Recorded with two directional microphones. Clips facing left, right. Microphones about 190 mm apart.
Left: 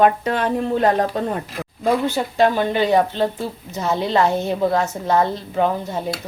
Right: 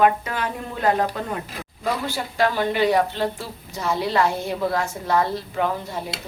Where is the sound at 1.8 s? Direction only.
20° left (ahead or behind).